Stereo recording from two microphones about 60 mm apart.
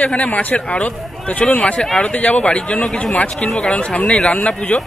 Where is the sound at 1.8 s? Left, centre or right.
Centre.